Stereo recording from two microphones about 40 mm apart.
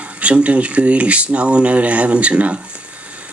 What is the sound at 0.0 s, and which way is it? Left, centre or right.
Speech, right.